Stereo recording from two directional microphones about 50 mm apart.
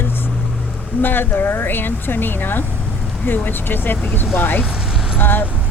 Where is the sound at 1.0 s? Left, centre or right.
Left.